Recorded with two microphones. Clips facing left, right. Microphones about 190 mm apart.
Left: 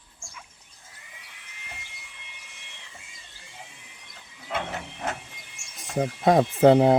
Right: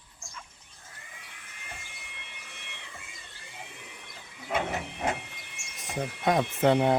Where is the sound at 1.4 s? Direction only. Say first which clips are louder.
Even; 50° right (ahead or behind).